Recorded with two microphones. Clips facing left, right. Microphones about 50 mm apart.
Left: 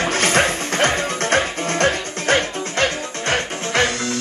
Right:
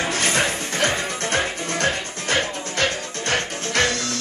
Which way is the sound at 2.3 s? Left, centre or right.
Left.